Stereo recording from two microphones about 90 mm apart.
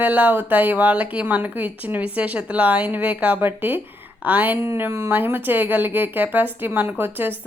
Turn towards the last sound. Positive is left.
turn(degrees=-25)  # may be behind; listen again after turning